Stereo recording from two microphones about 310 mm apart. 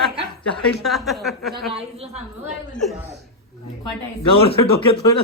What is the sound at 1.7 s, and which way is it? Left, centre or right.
Speech, centre.